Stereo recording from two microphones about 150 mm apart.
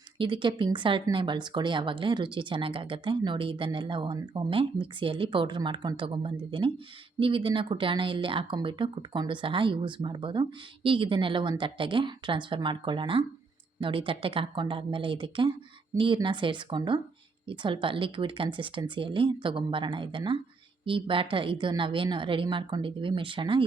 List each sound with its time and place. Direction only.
0.2 s speech: 35° right (ahead or behind)